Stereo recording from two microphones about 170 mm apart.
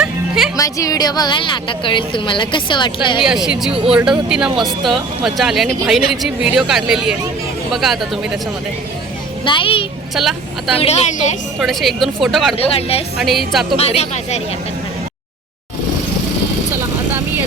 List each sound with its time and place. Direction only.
0.0 s music: centre (ahead or behind)
0.5 s a woman's voice: 20° left (ahead or behind)
3.2 s speech: 5° right (ahead or behind)
9.4 s a woman's voice: 30° left (ahead or behind)
10.2 s speech: centre (ahead or behind)
10.8 s speech: 40° left (ahead or behind)
11.6 s speech: centre (ahead or behind)
12.5 s speech: 35° left (ahead or behind)